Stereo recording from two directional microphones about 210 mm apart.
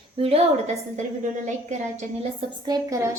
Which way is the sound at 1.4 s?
35° right (ahead or behind).